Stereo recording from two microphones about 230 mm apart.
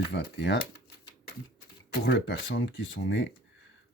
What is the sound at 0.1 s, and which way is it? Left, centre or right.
Speech, left.